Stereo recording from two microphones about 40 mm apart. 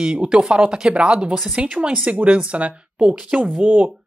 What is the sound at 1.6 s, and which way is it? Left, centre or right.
Speech, right.